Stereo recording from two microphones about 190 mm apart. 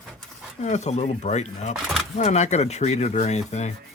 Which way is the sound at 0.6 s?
40° left (ahead or behind).